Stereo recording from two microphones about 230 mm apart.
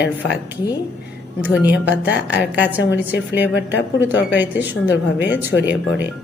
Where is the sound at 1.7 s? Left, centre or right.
Left.